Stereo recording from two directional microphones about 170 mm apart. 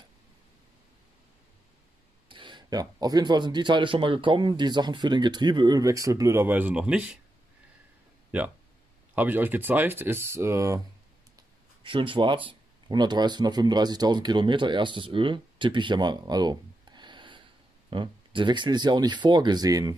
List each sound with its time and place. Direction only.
2.2 s speech: 30° right (ahead or behind); by 7.2 s 5° right (ahead or behind)
8.3 s speech: 5° right (ahead or behind)
11.3 s speech: 30° right (ahead or behind)